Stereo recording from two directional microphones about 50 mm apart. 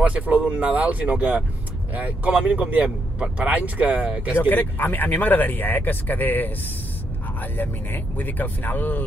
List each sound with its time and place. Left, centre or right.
0.0 s speech: right
2.3 s speech: right
4.4 s speech: left
7.5 s speech: left